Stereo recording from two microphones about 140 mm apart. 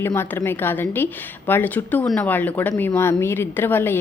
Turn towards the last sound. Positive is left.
turn(degrees=15)  # may be behind; listen again after turning